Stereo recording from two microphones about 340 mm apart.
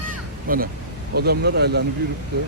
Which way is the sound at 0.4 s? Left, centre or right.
Right.